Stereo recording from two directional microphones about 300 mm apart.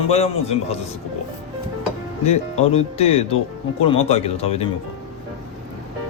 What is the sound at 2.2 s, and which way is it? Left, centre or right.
Speech, left.